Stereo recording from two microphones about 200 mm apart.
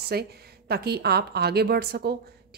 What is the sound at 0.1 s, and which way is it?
A woman's voice, 50° right (ahead or behind).